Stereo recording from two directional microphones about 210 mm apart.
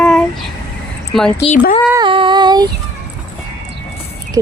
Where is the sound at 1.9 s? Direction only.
20° right (ahead or behind).